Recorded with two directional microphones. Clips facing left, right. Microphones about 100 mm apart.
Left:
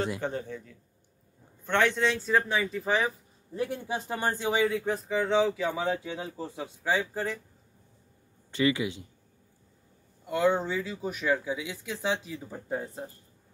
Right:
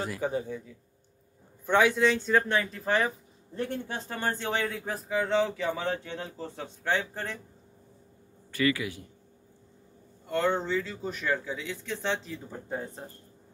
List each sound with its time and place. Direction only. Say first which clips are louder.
0.2 s a man's voice: right 3 dB; 10° right (ahead or behind); by 4.6 s 15° left (ahead or behind)
4.6 s speech: left 5 dB; centre (ahead or behind)
8.5 s a man's voice: left 1 dB; 20° left (ahead or behind)
10.2 s speech: left 2 dB; 10° left (ahead or behind)